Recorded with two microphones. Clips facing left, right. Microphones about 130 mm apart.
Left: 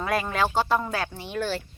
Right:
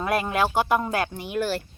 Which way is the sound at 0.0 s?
10° right (ahead or behind).